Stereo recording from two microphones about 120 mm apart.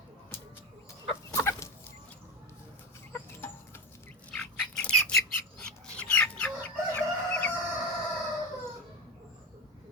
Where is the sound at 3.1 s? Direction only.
20° left (ahead or behind).